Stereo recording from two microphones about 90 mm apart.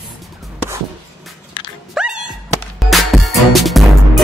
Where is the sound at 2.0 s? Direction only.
10° right (ahead or behind).